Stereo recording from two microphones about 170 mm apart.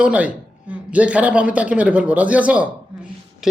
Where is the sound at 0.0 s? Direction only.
10° right (ahead or behind).